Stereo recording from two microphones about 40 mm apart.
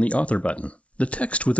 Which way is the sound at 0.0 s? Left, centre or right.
Left.